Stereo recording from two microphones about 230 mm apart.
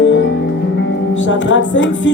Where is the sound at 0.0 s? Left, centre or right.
Left.